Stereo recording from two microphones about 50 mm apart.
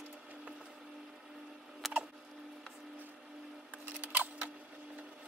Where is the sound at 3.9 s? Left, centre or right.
Right.